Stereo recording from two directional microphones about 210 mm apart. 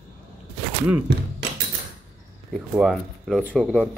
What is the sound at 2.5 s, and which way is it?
Speech, centre (ahead or behind).